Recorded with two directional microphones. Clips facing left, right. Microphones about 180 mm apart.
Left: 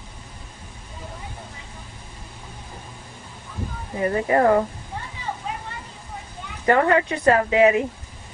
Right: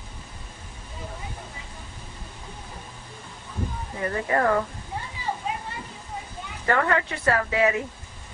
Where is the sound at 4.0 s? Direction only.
20° left (ahead or behind).